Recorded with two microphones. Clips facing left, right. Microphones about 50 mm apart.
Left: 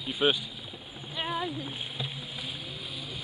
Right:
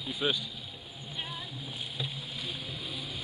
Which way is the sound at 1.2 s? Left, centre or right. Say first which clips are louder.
Left 11 dB; left.